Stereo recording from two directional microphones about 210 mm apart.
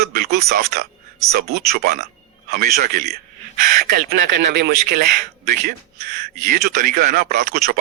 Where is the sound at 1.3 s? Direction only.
50° right (ahead or behind).